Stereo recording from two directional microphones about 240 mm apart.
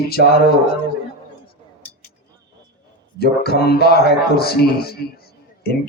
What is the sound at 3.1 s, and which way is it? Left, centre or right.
Speech, left.